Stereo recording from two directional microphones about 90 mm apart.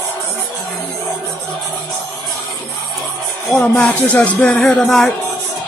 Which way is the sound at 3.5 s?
15° left (ahead or behind).